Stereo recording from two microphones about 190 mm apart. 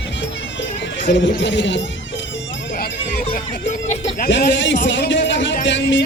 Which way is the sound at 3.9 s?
35° left (ahead or behind).